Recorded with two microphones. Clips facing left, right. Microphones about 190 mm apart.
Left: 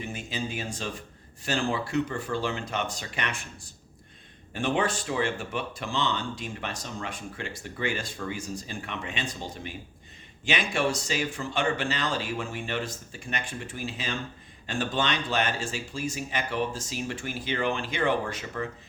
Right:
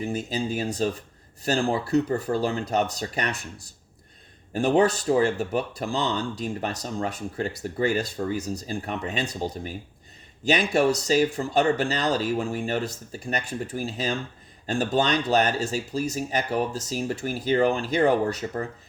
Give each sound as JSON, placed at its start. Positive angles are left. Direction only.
{"t": 0.0, "sound": "speech", "side_deg": -35}